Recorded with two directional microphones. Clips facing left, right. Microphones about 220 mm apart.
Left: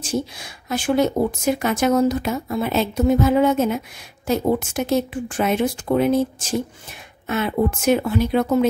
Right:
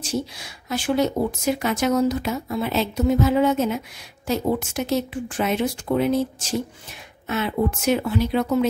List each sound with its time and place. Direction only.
0.0 s speech: 50° left (ahead or behind)